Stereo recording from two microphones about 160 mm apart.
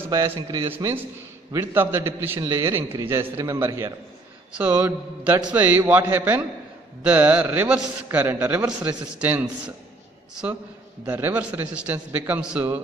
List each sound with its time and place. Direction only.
0.5 s a man's voice: 15° right (ahead or behind)
11.1 s a man's voice: 10° right (ahead or behind)